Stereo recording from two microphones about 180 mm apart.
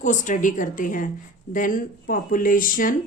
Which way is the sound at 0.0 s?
45° left (ahead or behind).